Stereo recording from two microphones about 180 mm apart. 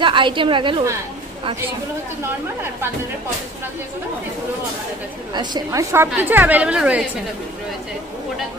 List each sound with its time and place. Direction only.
0.0 s a woman's voice: 25° right (ahead or behind)
5.3 s a woman's voice: 25° right (ahead or behind); by 7.1 s 5° right (ahead or behind)